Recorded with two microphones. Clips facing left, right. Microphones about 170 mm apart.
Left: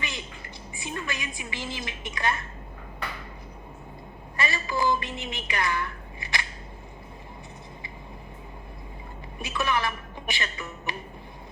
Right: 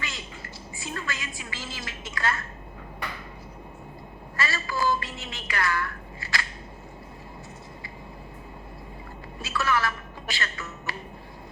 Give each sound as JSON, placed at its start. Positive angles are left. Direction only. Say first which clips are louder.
{"t": 0.0, "sound": "a woman's voice", "louder": "left 1 dB", "side_deg": 20}
{"t": 4.4, "sound": "a sound", "louder": "left 1 dB", "side_deg": 20}
{"t": 9.4, "sound": "speech", "louder": "right 1 dB", "side_deg": 20}